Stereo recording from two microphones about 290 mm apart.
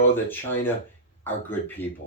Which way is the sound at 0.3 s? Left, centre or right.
Centre.